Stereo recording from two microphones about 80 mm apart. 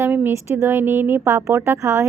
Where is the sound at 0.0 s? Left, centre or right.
Right.